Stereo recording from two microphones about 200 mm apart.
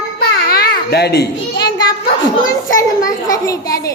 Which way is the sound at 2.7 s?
15° left (ahead or behind).